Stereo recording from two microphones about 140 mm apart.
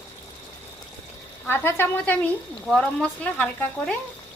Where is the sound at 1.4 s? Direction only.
15° left (ahead or behind).